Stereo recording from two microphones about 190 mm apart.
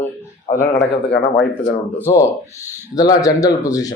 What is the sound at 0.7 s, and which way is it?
Speech, 60° left (ahead or behind).